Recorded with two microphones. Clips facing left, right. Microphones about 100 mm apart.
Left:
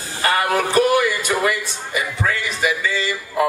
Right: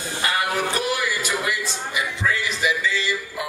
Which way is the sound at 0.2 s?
50° left (ahead or behind).